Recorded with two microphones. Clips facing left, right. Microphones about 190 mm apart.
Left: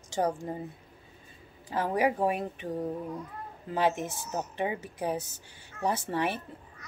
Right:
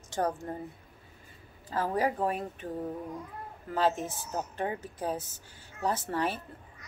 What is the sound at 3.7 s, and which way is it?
Speech, 15° left (ahead or behind).